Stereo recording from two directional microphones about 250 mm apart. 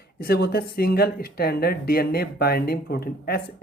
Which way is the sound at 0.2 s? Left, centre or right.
Left.